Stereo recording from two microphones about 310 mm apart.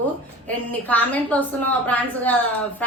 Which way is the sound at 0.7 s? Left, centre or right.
Centre.